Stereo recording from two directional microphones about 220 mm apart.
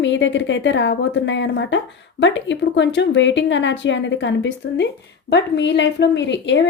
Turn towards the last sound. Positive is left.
turn(degrees=55)  # may be behind; listen again after turning